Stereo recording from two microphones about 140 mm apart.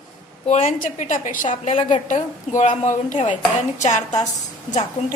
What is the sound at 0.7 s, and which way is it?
A woman's voice, 65° left (ahead or behind).